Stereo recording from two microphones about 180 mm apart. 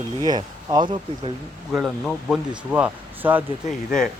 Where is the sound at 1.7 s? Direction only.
Centre (ahead or behind).